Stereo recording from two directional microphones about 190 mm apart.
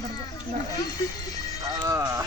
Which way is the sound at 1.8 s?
15° right (ahead or behind).